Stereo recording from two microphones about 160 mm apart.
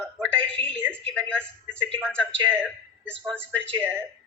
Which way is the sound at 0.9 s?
5° left (ahead or behind).